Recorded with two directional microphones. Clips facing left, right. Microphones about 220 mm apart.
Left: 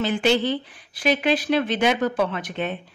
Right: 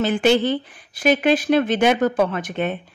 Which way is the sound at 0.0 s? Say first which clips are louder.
Right 3 dB; 50° right (ahead or behind).